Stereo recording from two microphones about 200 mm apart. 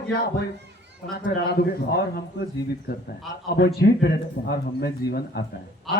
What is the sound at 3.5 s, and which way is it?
A man's voice, 50° left (ahead or behind).